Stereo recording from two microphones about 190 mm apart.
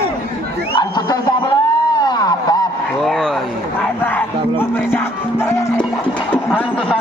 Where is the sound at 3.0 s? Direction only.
Centre (ahead or behind).